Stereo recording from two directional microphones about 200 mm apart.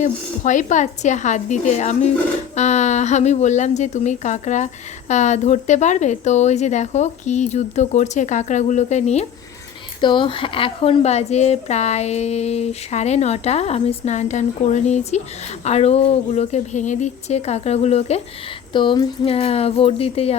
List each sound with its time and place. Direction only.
0.0 s speech: 40° left (ahead or behind)
10.0 s speech: 25° left (ahead or behind)